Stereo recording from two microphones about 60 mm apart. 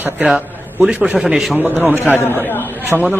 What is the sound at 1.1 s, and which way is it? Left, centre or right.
Speech, centre.